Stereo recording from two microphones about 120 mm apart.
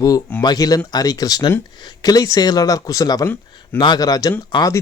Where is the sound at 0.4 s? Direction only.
30° left (ahead or behind).